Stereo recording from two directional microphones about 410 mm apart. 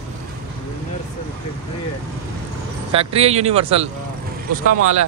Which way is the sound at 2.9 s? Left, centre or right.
Centre.